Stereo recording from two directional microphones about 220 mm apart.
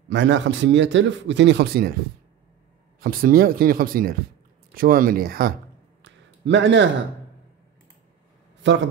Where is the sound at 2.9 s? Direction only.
40° right (ahead or behind).